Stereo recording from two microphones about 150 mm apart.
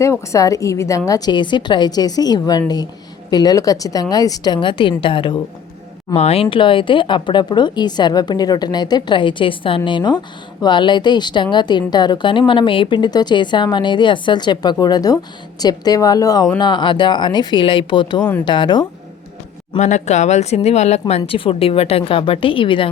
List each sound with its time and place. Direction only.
0.0 s a woman's voice: 20° left (ahead or behind)
19.8 s speech: 50° left (ahead or behind); by 22.9 s 35° left (ahead or behind)